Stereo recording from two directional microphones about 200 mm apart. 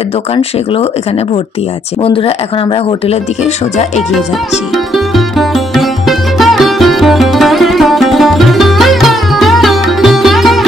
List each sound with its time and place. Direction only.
4.9 s music: centre (ahead or behind)